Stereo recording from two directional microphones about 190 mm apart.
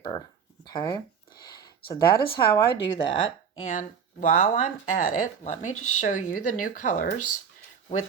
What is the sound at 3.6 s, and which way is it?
Speech, 40° left (ahead or behind).